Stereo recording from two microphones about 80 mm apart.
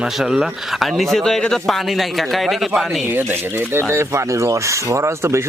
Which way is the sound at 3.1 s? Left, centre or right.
Right.